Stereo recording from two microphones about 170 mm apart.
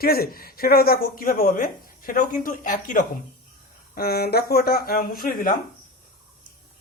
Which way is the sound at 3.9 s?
65° left (ahead or behind).